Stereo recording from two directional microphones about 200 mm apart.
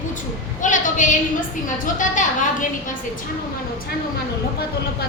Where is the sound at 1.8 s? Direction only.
40° left (ahead or behind).